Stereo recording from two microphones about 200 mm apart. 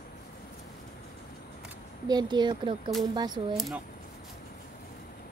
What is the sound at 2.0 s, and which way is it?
Speech, 20° right (ahead or behind).